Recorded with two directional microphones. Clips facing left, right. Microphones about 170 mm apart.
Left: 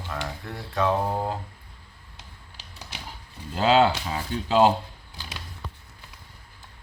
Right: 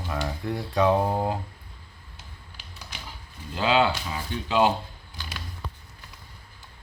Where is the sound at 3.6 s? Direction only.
40° left (ahead or behind).